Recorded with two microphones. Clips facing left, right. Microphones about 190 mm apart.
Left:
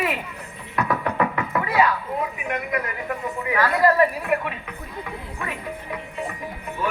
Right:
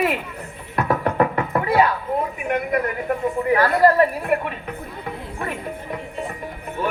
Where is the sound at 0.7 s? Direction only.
35° right (ahead or behind).